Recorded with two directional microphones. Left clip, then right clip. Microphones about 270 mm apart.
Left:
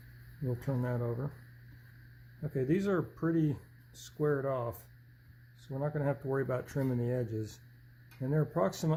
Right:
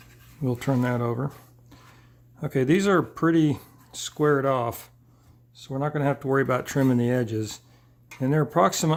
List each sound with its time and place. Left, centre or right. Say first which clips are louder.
0.4 s speech: right 11 dB; right
2.4 s speech: right 10 dB; right